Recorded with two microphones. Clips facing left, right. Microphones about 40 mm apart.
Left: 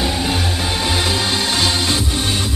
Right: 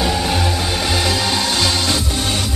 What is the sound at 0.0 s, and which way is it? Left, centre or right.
Music, centre.